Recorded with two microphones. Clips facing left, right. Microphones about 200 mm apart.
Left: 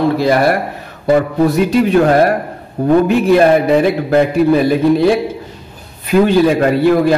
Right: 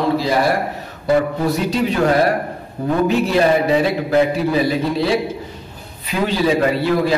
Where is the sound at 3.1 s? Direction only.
55° left (ahead or behind).